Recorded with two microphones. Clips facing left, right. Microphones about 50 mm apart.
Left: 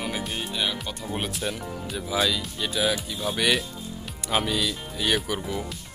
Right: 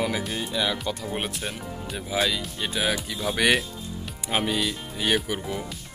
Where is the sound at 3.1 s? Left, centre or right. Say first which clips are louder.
Right 2 dB; right.